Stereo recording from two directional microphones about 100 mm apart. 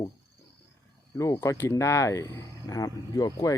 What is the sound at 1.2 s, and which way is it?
Speech, 30° left (ahead or behind).